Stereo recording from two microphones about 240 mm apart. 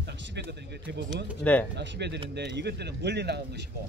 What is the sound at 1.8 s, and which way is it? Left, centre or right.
Speech, right.